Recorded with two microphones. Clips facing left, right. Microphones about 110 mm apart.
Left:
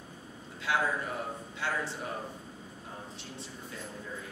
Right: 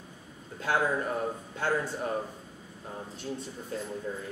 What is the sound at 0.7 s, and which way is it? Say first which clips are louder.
Speech: right 3 dB; 45° right (ahead or behind).